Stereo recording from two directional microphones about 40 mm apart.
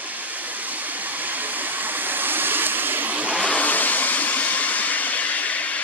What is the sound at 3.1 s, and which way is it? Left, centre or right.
Vehicle, right.